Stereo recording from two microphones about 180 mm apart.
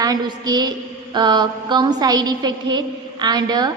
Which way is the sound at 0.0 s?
20° right (ahead or behind).